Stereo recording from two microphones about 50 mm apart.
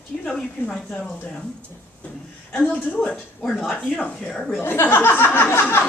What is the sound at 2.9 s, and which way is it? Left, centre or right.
Speech, left.